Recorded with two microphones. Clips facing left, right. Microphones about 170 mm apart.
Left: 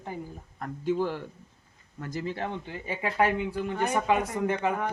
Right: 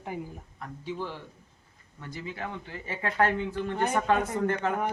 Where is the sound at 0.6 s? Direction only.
50° left (ahead or behind); by 4.8 s 10° left (ahead or behind).